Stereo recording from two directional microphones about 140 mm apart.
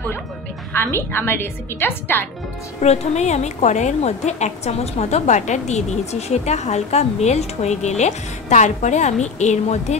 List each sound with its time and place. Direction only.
0.7 s a woman's voice: 15° left (ahead or behind)
2.8 s a woman's voice: 50° left (ahead or behind)